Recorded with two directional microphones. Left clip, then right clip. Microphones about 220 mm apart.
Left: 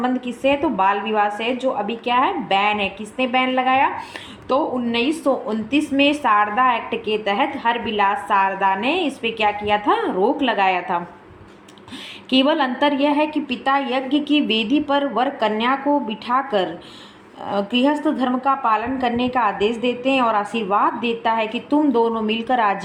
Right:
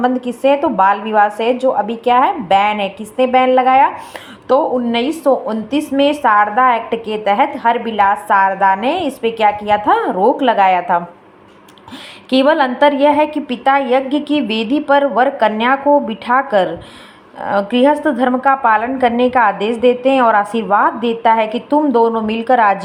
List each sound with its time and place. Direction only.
0.0 s a woman's voice: 25° right (ahead or behind)
12.3 s a woman's voice: 15° right (ahead or behind)